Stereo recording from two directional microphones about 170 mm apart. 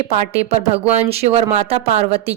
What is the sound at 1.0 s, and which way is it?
Speech, 40° right (ahead or behind).